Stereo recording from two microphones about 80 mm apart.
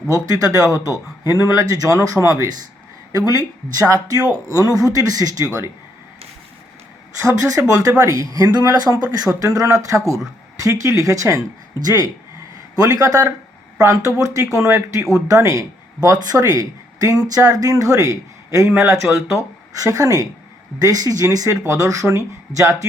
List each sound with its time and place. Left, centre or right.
0.3 s speech: right
7.2 s speech: right
12.7 s speech: right